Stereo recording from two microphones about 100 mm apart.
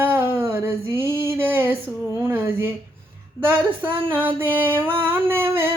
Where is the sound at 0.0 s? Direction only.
20° right (ahead or behind).